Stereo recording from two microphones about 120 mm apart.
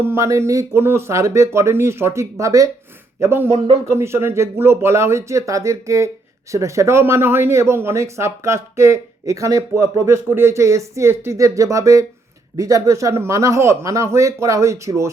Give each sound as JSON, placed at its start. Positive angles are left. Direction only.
{"t": 0.0, "sound": "speech", "side_deg": -20}